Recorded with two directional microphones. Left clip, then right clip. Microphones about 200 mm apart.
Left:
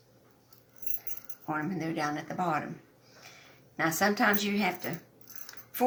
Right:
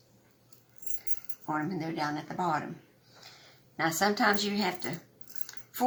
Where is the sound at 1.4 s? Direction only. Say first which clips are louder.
Even; 30° left (ahead or behind).